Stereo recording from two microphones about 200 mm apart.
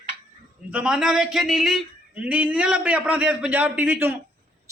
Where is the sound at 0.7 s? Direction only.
5° right (ahead or behind).